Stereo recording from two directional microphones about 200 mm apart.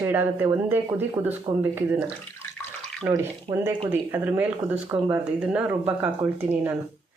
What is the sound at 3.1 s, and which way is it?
Speech, 10° right (ahead or behind).